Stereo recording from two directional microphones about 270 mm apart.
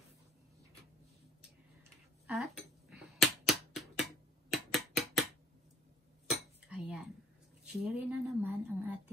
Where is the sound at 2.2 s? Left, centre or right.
Centre.